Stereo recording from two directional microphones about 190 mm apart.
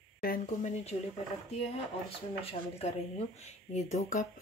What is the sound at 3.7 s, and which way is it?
Speech, 40° left (ahead or behind).